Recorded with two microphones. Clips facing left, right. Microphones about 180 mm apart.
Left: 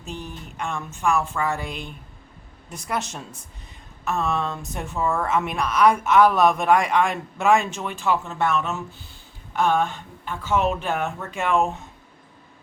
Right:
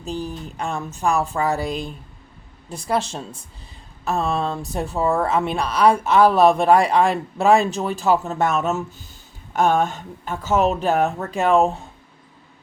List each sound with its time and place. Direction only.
0.0 s speech: 35° right (ahead or behind)